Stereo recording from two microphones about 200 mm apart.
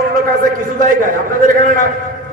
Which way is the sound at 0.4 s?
45° right (ahead or behind).